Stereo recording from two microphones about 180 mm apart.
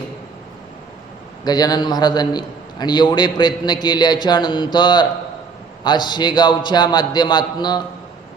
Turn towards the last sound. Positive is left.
turn(degrees=25)  # may be behind; listen again after turning